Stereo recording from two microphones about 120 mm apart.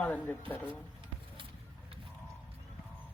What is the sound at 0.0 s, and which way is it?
Speech, 10° left (ahead or behind).